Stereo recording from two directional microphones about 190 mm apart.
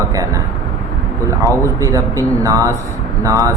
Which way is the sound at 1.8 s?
15° right (ahead or behind).